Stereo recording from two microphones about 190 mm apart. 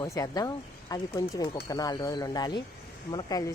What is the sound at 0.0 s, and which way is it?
Speech, 20° left (ahead or behind).